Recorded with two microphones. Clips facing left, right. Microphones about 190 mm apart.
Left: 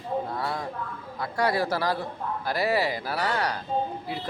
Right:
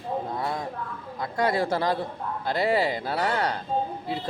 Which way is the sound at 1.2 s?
20° right (ahead or behind).